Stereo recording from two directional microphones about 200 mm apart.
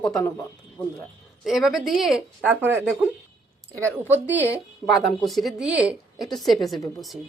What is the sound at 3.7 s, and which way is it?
A woman's voice, 10° right (ahead or behind).